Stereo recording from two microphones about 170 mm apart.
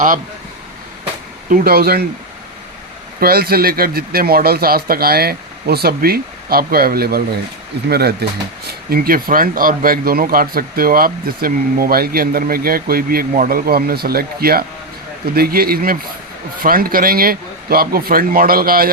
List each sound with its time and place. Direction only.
1.5 s speech: 60° right (ahead or behind)
3.2 s speech: 65° right (ahead or behind)